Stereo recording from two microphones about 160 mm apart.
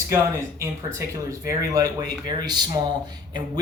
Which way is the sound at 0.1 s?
15° right (ahead or behind).